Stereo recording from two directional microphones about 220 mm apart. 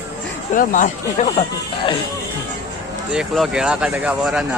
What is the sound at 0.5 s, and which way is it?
Speech, 35° left (ahead or behind).